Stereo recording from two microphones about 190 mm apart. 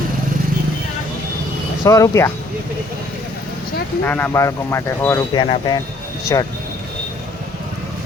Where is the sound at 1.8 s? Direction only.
15° left (ahead or behind).